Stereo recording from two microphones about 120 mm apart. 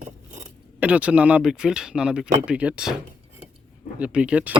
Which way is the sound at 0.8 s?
10° right (ahead or behind).